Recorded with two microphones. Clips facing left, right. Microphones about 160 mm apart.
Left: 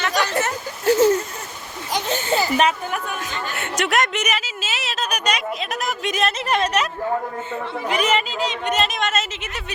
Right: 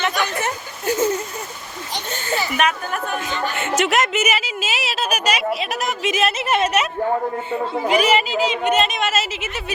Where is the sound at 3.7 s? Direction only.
Centre (ahead or behind).